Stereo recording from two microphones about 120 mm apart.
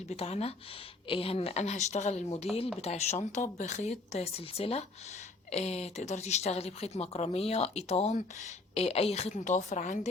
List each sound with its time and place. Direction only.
0.1 s speech: 60° left (ahead or behind); by 10.1 s 85° left